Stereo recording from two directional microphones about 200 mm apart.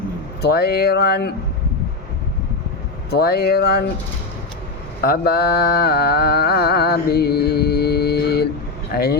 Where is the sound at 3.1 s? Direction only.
50° left (ahead or behind).